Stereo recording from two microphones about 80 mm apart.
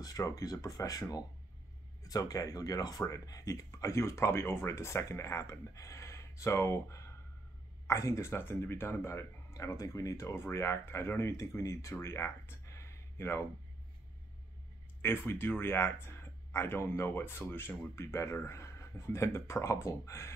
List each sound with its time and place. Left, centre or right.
0.0 s speech: left
15.0 s speech: left